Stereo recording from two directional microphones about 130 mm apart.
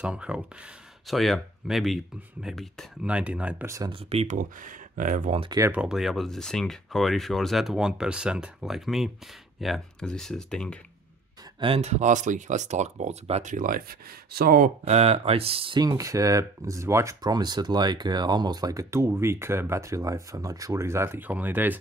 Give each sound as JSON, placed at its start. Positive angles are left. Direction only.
{"t": 0.0, "sound": "speech", "side_deg": -10}
{"t": 3.1, "sound": "speech", "side_deg": -10}
{"t": 3.6, "sound": "speech", "side_deg": -25}
{"t": 3.9, "sound": "speech", "side_deg": -50}
{"t": 4.4, "sound": "speech", "side_deg": -90}
{"t": 5.7, "sound": "speech", "side_deg": -5}
{"t": 11.6, "sound": "speech", "side_deg": -50}
{"t": 14.9, "sound": "speech", "side_deg": -50}
{"t": 15.8, "sound": "speech", "side_deg": -30}